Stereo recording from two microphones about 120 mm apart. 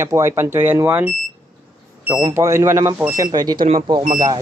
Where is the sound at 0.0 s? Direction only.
25° right (ahead or behind).